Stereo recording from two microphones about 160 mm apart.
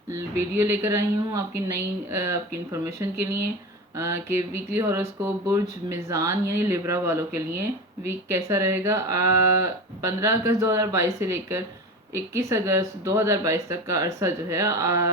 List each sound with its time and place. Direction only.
0.1 s speech: 20° right (ahead or behind)